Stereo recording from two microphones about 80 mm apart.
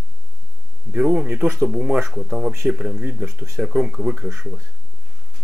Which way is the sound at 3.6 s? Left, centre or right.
Centre.